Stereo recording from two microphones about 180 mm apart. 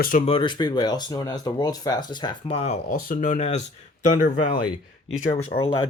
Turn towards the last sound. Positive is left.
turn(degrees=30)  # may be behind; listen again after turning